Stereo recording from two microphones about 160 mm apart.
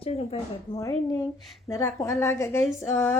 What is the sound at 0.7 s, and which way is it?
Speech, 30° left (ahead or behind).